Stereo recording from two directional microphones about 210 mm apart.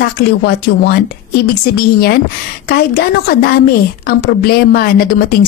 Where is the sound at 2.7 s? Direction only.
45° left (ahead or behind).